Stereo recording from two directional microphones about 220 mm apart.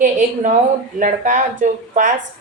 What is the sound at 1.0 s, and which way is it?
A woman's voice, 35° right (ahead or behind).